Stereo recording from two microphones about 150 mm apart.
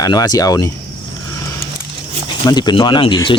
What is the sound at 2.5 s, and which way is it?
Speech, 30° left (ahead or behind).